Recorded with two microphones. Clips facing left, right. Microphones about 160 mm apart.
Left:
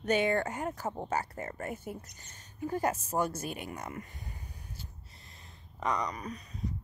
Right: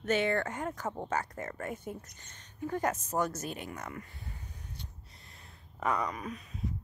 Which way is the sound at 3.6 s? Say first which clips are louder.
Left 1 dB; 20° left (ahead or behind).